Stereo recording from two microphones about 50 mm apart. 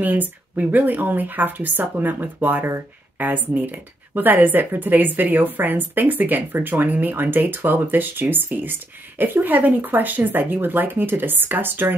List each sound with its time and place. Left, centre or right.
0.0 s speech: right